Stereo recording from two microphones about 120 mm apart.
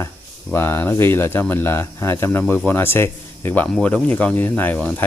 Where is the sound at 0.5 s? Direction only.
15° left (ahead or behind).